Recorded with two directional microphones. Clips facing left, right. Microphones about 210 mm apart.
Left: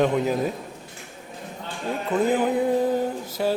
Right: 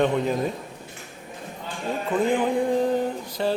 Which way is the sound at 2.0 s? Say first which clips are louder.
Left 1 dB; 5° left (ahead or behind).